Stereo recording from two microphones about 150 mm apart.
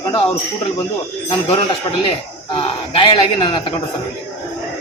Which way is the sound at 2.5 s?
40° left (ahead or behind).